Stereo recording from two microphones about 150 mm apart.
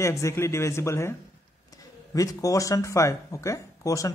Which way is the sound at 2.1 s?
20° left (ahead or behind).